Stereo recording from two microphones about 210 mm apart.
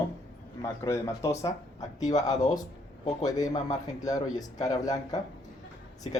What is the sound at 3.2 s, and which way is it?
Speech, 15° left (ahead or behind).